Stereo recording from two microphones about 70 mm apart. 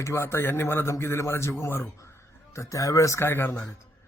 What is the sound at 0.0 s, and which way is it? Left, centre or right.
A man's voice, left.